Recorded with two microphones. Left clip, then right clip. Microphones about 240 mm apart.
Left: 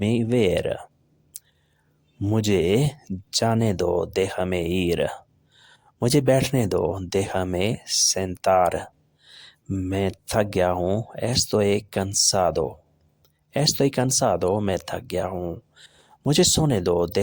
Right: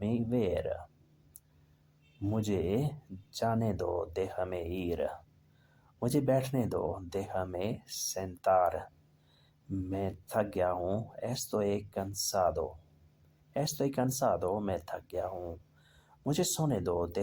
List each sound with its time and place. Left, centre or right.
0.0 s speech: left
2.2 s speech: left